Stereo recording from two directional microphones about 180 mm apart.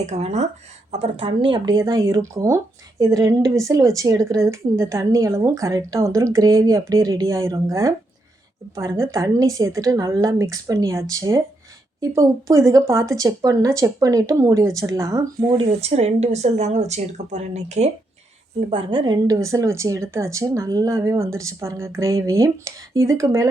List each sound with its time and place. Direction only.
0.0 s a woman's voice: 40° right (ahead or behind); by 15.6 s 20° right (ahead or behind)
15.8 s a woman's voice: 35° right (ahead or behind); by 23.5 s 15° right (ahead or behind)